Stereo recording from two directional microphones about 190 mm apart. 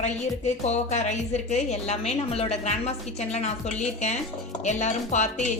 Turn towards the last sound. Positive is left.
turn(degrees=40)  # may be behind; listen again after turning